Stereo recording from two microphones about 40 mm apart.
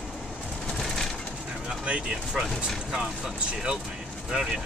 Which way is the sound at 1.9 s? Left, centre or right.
Right.